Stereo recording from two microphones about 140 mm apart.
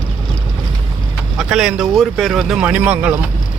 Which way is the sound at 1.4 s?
5° right (ahead or behind).